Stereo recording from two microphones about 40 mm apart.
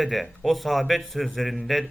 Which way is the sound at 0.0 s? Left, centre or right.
Centre.